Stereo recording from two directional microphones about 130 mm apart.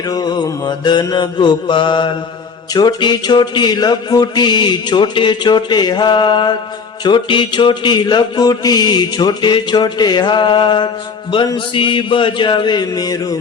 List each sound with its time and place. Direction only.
0.1 s mantra: 30° left (ahead or behind)